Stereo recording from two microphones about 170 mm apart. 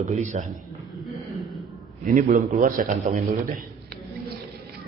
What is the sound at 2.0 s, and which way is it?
A man's voice, 50° right (ahead or behind).